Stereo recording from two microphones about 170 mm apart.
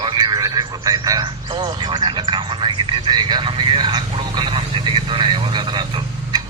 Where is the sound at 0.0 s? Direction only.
25° right (ahead or behind).